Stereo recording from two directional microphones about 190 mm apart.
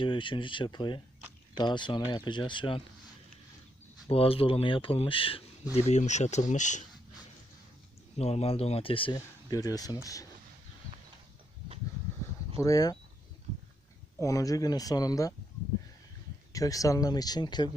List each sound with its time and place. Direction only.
0.0 s speech: 25° left (ahead or behind)
4.1 s speech: 30° left (ahead or behind)
8.2 s speech: 35° left (ahead or behind)
12.5 s speech: 20° left (ahead or behind)
14.2 s speech: 20° left (ahead or behind)
16.5 s speech: 15° left (ahead or behind)